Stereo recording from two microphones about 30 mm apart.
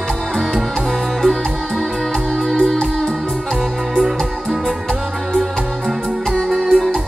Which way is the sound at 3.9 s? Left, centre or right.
Centre.